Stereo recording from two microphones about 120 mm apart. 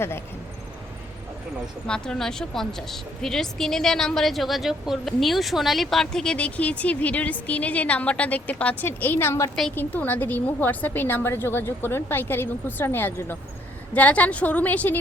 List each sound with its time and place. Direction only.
1.9 s a woman's voice: 5° left (ahead or behind)